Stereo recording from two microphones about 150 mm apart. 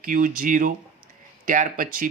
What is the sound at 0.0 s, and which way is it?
Speech, 65° right (ahead or behind).